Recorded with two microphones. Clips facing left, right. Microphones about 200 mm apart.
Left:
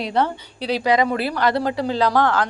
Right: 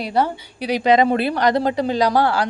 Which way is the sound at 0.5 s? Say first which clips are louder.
Right 3 dB; 15° right (ahead or behind).